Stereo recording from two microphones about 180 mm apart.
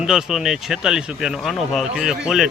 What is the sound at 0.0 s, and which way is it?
Speech, 5° right (ahead or behind).